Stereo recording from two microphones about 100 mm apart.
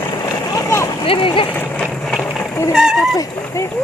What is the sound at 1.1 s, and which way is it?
Speech, 60° left (ahead or behind).